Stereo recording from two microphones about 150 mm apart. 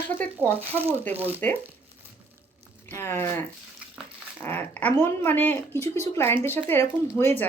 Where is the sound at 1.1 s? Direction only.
10° right (ahead or behind).